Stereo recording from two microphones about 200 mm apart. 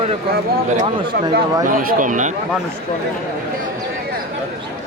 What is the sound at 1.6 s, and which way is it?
Speech, 45° right (ahead or behind).